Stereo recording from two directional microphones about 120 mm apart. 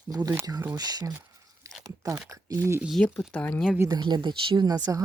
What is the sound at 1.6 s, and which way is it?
Crunch, 30° right (ahead or behind).